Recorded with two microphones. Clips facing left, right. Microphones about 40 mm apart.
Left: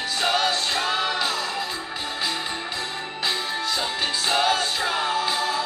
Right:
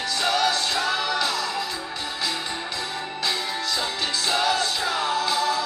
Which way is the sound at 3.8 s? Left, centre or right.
Centre.